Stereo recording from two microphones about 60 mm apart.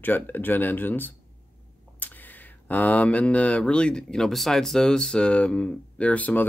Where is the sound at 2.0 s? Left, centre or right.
Left.